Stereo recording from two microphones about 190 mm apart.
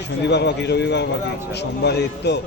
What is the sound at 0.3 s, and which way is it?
A man's voice, 65° left (ahead or behind).